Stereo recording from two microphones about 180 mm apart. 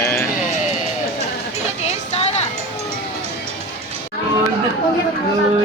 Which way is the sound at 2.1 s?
35° left (ahead or behind).